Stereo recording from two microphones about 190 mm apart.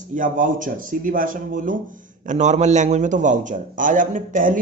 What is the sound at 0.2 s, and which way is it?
A man's voice, 45° right (ahead or behind).